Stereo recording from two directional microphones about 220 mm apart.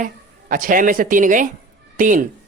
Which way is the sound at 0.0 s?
40° right (ahead or behind).